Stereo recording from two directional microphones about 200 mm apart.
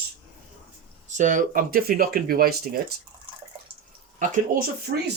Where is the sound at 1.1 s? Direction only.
40° right (ahead or behind).